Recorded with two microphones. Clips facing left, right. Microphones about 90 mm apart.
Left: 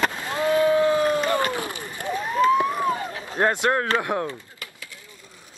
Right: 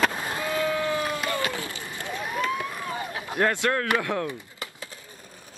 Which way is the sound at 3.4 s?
25° left (ahead or behind).